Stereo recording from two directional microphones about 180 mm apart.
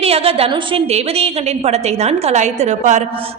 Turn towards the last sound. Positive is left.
turn(degrees=-40)  # may be behind; listen again after turning